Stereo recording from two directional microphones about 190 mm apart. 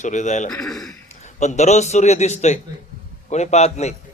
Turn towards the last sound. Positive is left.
turn(degrees=35)  # may be behind; listen again after turning